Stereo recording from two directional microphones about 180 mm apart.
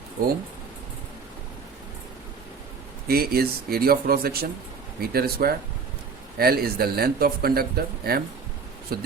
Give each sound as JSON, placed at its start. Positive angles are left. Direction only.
{"t": 3.1, "sound": "speech", "side_deg": -55}